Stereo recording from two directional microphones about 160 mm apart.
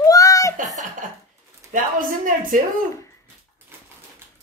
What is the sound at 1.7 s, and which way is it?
Speech, 55° right (ahead or behind).